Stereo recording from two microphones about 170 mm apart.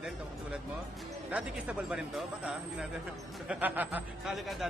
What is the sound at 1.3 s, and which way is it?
A man's voice, 5° right (ahead or behind).